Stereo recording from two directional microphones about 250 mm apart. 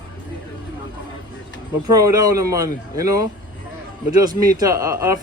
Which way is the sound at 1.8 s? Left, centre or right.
Centre.